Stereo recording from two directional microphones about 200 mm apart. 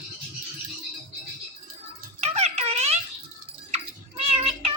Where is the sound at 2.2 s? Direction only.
30° right (ahead or behind).